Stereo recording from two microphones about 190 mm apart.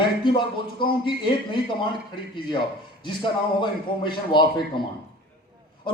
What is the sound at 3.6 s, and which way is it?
Speech, 25° left (ahead or behind).